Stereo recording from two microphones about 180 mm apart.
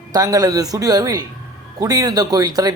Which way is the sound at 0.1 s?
20° right (ahead or behind).